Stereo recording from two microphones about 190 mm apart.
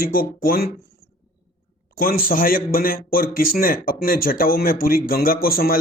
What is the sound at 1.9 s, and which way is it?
Speech, 50° left (ahead or behind).